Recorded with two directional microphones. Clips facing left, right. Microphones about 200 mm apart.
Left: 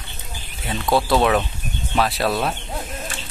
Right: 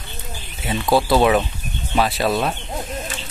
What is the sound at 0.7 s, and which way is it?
Speech, centre (ahead or behind).